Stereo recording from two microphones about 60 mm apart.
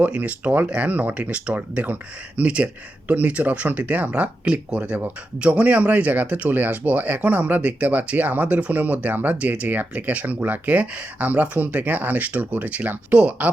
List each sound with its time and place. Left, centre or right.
0.0 s speech: right